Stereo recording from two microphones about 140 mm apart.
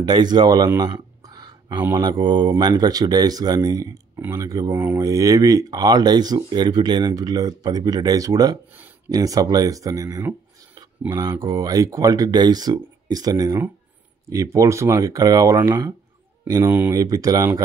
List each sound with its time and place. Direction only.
0.0 s speech: 30° right (ahead or behind)
0.7 s a sound: 30° right (ahead or behind)
1.8 s speech: 15° right (ahead or behind)
2.0 s speech: 30° right (ahead or behind)
8.7 s a sound: 15° right (ahead or behind)
9.1 s speech: 25° right (ahead or behind)